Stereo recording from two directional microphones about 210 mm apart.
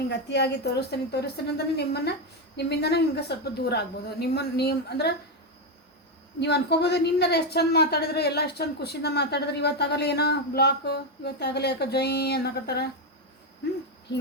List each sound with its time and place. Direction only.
0.1 s speech: 50° left (ahead or behind)
6.4 s speech: 50° left (ahead or behind)